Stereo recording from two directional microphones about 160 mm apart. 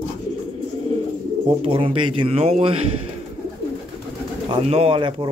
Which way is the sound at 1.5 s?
35° right (ahead or behind).